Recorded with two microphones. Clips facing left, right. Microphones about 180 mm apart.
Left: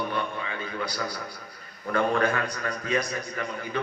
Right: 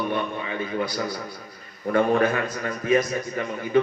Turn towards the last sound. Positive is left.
turn(degrees=-20)  # may be behind; listen again after turning